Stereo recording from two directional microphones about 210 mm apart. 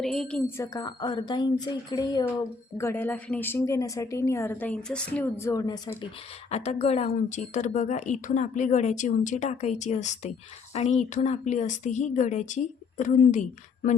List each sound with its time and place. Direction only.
0.0 s a woman's voice: centre (ahead or behind); by 6.1 s 20° left (ahead or behind)
6.5 s speech: 30° left (ahead or behind)